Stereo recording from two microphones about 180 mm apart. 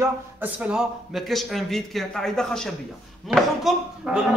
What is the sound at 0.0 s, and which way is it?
Speech, 5° right (ahead or behind).